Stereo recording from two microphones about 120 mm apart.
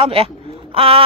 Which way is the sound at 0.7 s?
50° right (ahead or behind).